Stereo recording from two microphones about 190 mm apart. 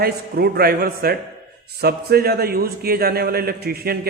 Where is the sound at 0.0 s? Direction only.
55° right (ahead or behind).